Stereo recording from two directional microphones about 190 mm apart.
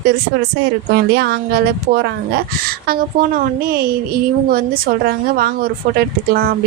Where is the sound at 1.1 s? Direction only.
60° right (ahead or behind).